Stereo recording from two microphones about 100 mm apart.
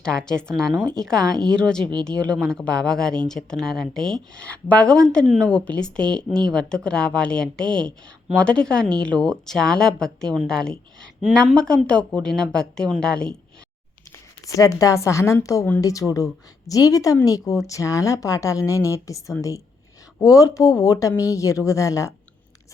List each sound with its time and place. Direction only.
0.0 s speech: 5° left (ahead or behind)
14.4 s a woman's voice: 35° left (ahead or behind)